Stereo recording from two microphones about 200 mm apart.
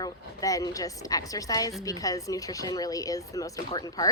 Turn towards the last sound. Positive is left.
turn(degrees=20)  # may be behind; listen again after turning